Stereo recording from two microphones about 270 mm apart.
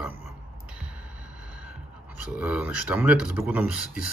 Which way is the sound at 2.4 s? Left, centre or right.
Centre.